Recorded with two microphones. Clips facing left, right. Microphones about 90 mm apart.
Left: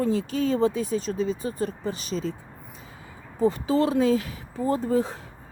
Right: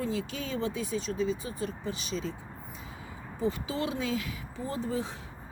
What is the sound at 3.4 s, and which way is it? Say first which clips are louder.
Speech: left 9 dB; 40° left (ahead or behind).